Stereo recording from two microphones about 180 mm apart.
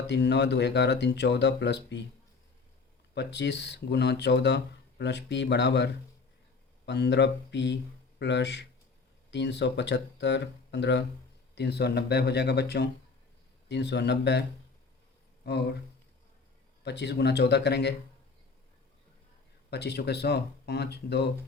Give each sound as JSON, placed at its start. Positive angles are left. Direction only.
{"t": 0.1, "sound": "speech", "side_deg": 75}
{"t": 3.2, "sound": "speech", "side_deg": 75}
{"t": 15.4, "sound": "speech", "side_deg": 65}
{"t": 16.8, "sound": "speech", "side_deg": 70}
{"t": 19.7, "sound": "speech", "side_deg": 65}